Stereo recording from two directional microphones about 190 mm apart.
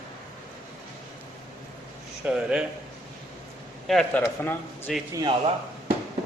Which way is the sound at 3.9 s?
5° left (ahead or behind).